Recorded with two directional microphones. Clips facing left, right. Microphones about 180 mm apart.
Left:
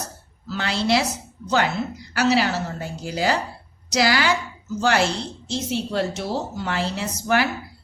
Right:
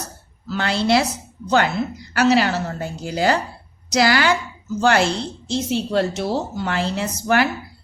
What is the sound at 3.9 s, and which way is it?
Speech, 55° right (ahead or behind).